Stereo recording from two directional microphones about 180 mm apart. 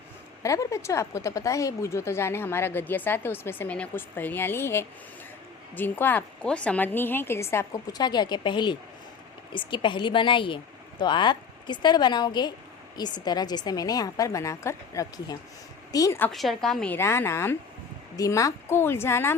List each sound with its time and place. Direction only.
0.4 s a woman's voice: 15° left (ahead or behind)
16.3 s a woman's voice: centre (ahead or behind)